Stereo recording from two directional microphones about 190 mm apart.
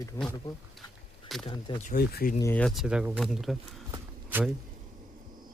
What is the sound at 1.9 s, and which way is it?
Speech, 50° left (ahead or behind).